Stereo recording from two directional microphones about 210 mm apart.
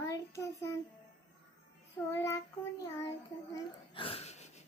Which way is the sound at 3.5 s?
25° left (ahead or behind).